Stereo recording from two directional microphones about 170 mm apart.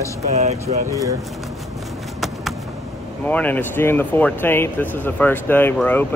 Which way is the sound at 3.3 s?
10° left (ahead or behind).